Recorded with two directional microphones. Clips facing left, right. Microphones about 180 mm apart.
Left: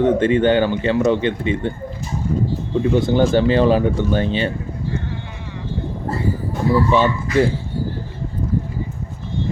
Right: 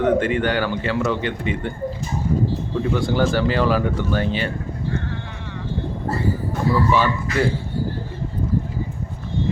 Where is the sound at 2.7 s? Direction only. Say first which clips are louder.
Left 7 dB; 20° left (ahead or behind).